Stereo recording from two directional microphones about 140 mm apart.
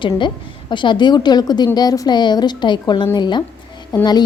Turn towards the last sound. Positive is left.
turn(degrees=30)  # may be behind; listen again after turning